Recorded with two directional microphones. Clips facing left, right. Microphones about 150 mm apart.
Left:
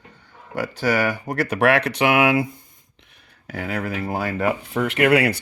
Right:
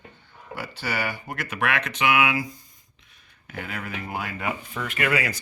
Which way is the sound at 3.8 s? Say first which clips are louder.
Left 7 dB; 35° left (ahead or behind).